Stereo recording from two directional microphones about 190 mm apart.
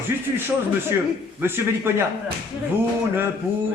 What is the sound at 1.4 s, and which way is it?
Speech, 10° right (ahead or behind).